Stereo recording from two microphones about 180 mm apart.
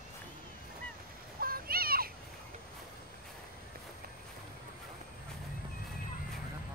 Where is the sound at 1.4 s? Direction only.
55° right (ahead or behind).